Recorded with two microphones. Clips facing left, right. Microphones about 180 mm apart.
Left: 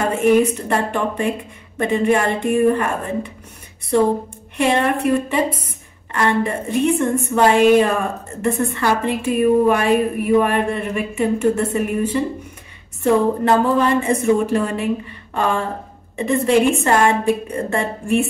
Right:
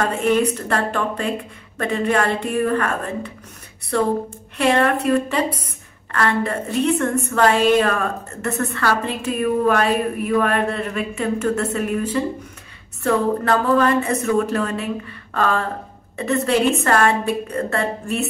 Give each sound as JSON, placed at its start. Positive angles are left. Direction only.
{"t": 0.0, "sound": "a woman's voice", "side_deg": 10}
{"t": 4.6, "sound": "a woman's voice", "side_deg": 10}
{"t": 13.0, "sound": "a woman's voice", "side_deg": 20}
{"t": 15.3, "sound": "a sound", "side_deg": 15}
{"t": 16.2, "sound": "a woman's voice", "side_deg": 10}